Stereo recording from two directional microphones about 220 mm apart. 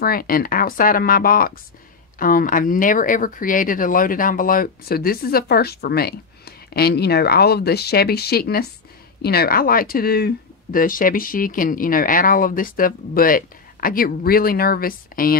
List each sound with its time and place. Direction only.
0.0 s speech: 40° left (ahead or behind)